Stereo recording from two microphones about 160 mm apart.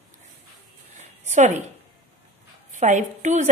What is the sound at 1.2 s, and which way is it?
Speech, 50° right (ahead or behind).